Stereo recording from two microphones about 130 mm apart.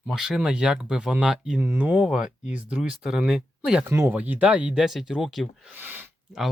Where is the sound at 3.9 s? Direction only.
20° right (ahead or behind).